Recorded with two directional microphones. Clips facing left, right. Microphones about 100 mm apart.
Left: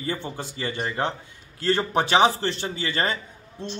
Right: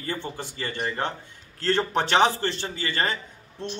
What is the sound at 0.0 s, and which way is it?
A man's voice, 15° left (ahead or behind).